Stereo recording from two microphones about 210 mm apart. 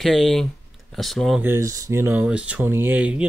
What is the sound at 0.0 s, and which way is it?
Speech, centre (ahead or behind).